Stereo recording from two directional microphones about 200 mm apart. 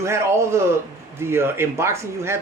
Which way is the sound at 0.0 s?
15° right (ahead or behind).